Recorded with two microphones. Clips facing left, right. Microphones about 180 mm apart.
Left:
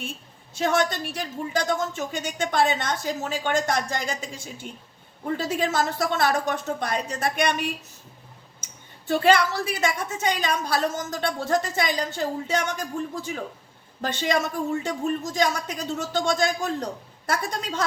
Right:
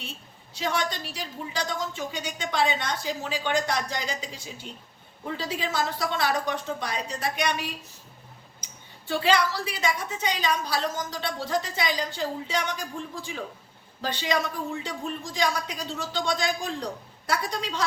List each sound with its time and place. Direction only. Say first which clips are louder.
0.0 s a woman's voice: left 5 dB; 50° left (ahead or behind)